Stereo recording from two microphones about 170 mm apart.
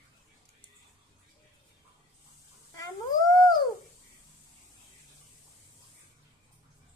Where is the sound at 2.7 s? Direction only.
20° left (ahead or behind).